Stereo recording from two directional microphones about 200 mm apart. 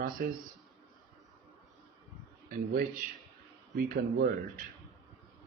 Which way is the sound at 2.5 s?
45° right (ahead or behind).